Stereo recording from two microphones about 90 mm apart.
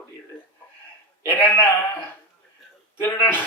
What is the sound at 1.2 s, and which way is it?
Speech, 25° left (ahead or behind).